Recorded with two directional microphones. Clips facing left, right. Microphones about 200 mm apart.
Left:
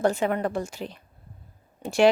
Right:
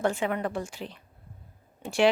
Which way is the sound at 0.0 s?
40° left (ahead or behind).